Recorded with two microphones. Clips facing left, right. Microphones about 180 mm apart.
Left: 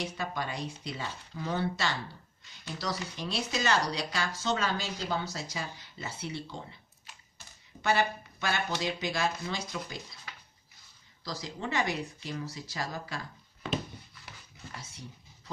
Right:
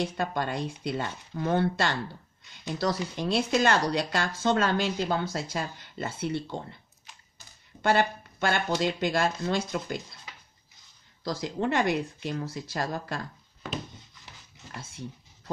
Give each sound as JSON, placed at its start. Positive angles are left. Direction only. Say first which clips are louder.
{"t": 0.0, "sound": "speech", "louder": "right 6 dB", "side_deg": -55}
{"t": 7.8, "sound": "speech", "louder": "right 4 dB", "side_deg": -55}
{"t": 11.2, "sound": "speech", "louder": "right 8 dB", "side_deg": -55}
{"t": 13.9, "sound": "a sound", "louder": "left 1 dB", "side_deg": -20}